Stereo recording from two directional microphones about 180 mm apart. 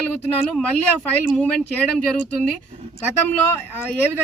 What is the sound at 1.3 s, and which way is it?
Speech, 5° left (ahead or behind).